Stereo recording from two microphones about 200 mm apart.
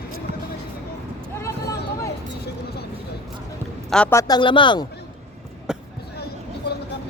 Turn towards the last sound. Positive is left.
turn(degrees=55)  # may be behind; listen again after turning